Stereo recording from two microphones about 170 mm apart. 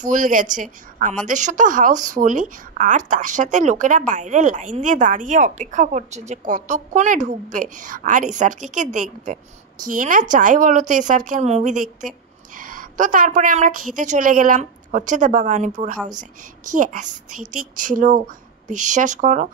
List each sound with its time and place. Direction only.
0.0 s speech: 50° right (ahead or behind)